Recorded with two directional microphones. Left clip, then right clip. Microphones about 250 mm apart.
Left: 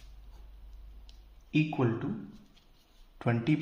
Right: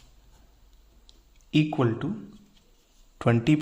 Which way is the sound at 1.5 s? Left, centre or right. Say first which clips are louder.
Right 5 dB; right.